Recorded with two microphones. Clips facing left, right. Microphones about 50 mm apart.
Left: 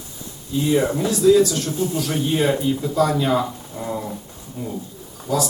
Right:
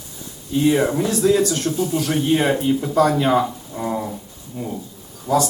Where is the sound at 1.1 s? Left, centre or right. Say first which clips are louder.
Left 5 dB; right.